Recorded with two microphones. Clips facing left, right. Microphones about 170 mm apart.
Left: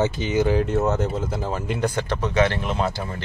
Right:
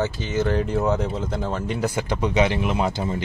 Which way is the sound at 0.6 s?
Centre (ahead or behind).